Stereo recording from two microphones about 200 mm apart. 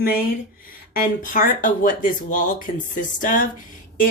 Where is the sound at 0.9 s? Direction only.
45° left (ahead or behind).